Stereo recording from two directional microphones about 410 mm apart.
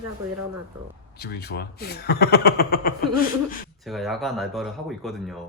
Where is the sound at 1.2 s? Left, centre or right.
Left.